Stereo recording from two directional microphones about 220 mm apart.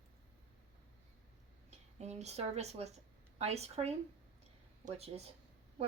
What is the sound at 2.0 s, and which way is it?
Speech, 30° right (ahead or behind).